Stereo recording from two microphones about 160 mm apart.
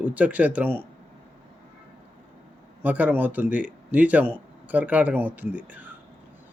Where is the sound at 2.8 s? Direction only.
10° right (ahead or behind).